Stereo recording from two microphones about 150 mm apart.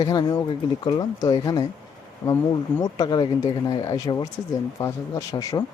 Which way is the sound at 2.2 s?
10° left (ahead or behind).